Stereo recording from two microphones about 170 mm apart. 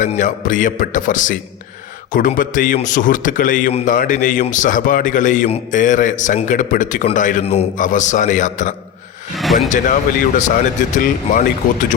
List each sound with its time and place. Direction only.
0.0 s speech: 50° left (ahead or behind)
9.4 s vehicle: centre (ahead or behind)
9.6 s speech: 50° left (ahead or behind)